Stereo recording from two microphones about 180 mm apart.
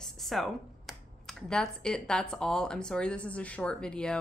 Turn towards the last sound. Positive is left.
turn(degrees=5)  # may be behind; listen again after turning